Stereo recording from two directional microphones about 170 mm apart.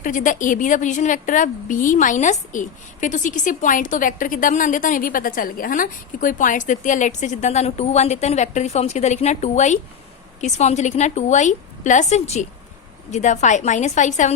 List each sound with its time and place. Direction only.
0.0 s a woman's voice: 50° left (ahead or behind)